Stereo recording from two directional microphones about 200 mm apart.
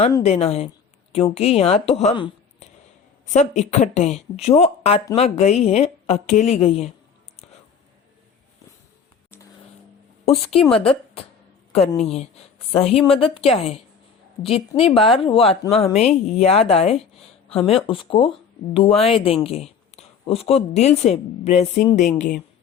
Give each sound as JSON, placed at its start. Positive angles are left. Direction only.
{"t": 0.2, "sound": "a woman's voice", "side_deg": 30}
{"t": 10.2, "sound": "a woman's voice", "side_deg": 30}
{"t": 15.0, "sound": "a woman's voice", "side_deg": 25}